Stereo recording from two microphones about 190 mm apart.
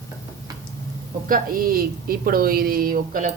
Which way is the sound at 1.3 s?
50° right (ahead or behind).